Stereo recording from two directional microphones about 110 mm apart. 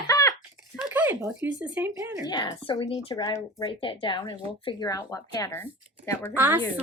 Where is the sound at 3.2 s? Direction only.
35° left (ahead or behind).